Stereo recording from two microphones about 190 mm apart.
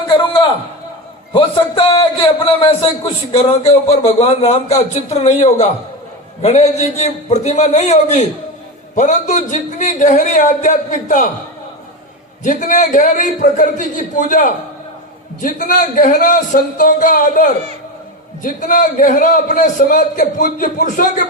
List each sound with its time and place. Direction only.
1.3 s a man's voice: 25° left (ahead or behind)
12.4 s a man's voice: 45° left (ahead or behind)